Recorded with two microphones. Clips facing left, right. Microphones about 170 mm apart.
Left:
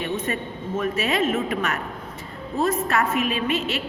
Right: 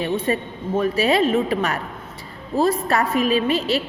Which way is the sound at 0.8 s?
35° right (ahead or behind).